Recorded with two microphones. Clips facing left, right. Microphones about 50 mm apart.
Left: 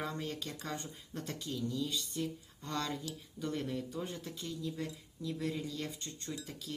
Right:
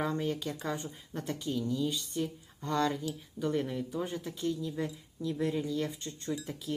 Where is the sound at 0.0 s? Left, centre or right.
Centre.